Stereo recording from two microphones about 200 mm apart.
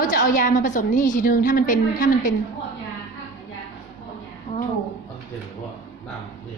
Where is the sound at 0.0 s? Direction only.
45° left (ahead or behind).